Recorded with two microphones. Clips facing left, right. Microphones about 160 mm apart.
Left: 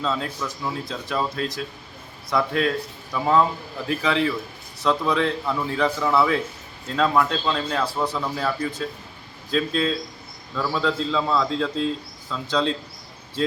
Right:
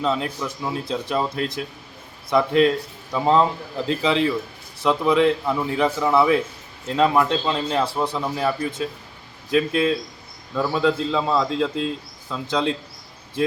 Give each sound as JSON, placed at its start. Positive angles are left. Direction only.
{"t": 0.0, "sound": "a man's voice", "side_deg": -20}